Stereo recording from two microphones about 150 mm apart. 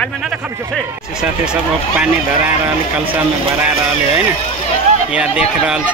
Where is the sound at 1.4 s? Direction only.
10° right (ahead or behind).